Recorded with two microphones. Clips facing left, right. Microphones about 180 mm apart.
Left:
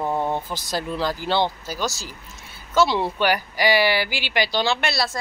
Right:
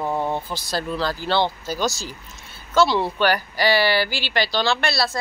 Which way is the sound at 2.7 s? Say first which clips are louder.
Right 1 dB; 20° left (ahead or behind).